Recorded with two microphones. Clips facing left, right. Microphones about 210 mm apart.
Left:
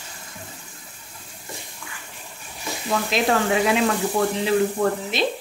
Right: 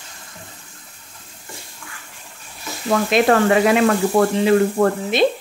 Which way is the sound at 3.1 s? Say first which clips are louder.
Right 6 dB; 60° right (ahead or behind).